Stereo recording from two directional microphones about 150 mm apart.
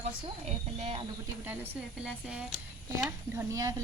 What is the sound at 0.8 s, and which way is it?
Speech, 40° right (ahead or behind).